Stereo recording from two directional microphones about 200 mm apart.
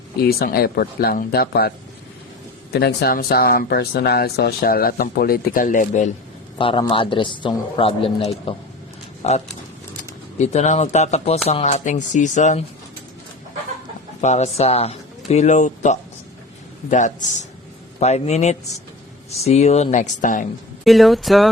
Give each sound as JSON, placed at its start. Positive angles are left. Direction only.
{"t": 0.2, "sound": "speech", "side_deg": 50}
{"t": 2.7, "sound": "speech", "side_deg": 55}
{"t": 6.6, "sound": "a man's voice", "side_deg": 25}
{"t": 14.2, "sound": "speech", "side_deg": 35}
{"t": 20.8, "sound": "speech", "side_deg": 0}